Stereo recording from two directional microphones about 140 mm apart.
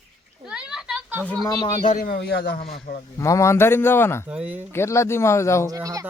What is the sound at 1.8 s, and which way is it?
Speech, 70° left (ahead or behind).